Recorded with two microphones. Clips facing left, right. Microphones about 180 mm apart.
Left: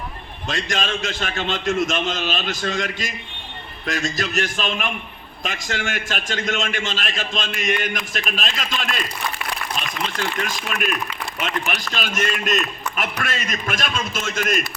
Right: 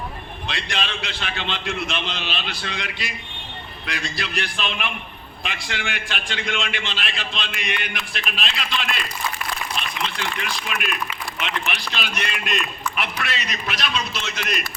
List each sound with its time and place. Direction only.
0.4 s a man's voice: 45° left (ahead or behind)
10.2 s a man's voice: 45° left (ahead or behind)